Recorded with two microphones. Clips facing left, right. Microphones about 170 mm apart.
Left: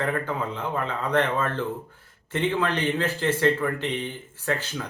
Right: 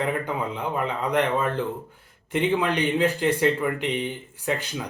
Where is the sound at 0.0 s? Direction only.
15° right (ahead or behind).